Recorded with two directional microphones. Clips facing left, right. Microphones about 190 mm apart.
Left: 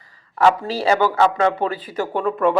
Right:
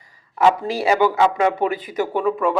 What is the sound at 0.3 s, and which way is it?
A man's voice, 15° right (ahead or behind).